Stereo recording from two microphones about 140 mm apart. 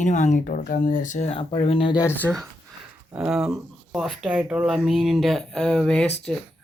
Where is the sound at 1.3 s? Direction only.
40° left (ahead or behind).